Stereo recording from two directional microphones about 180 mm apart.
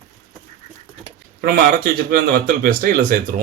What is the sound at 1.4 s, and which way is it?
A man's voice, 60° right (ahead or behind).